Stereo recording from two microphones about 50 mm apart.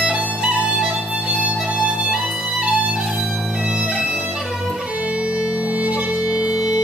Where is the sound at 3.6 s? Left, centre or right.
Centre.